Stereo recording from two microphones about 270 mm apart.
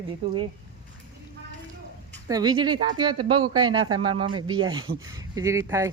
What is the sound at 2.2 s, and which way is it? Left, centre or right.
Speech, centre.